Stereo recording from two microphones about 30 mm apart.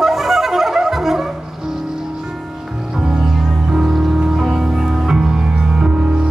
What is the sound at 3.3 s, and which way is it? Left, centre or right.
Music, centre.